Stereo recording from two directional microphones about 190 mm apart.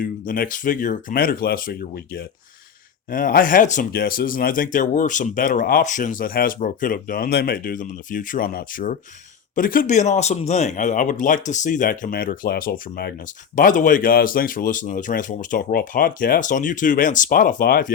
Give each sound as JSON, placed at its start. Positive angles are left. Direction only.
{"t": 0.0, "sound": "speech", "side_deg": 45}